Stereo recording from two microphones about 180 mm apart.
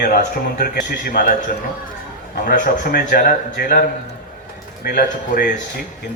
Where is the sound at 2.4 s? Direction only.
60° left (ahead or behind).